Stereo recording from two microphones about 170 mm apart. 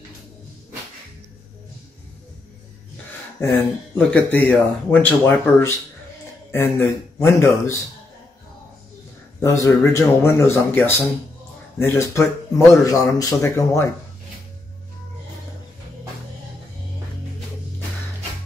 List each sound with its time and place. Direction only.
3.3 s speech: 10° left (ahead or behind)
9.4 s speech: 15° left (ahead or behind)